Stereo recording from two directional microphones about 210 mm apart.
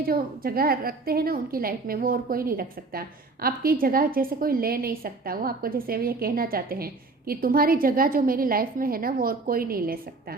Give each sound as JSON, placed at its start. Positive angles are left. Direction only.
{"t": 0.0, "sound": "a woman's voice", "side_deg": -45}